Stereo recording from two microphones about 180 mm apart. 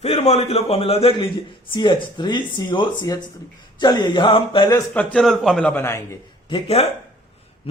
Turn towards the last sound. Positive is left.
turn(degrees=35)  # may be behind; listen again after turning